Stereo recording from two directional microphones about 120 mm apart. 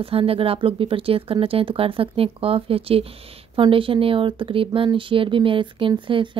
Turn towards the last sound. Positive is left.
turn(degrees=-45)  # may be behind; listen again after turning